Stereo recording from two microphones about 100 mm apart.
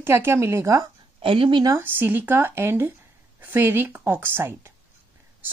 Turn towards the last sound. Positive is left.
turn(degrees=-25)  # may be behind; listen again after turning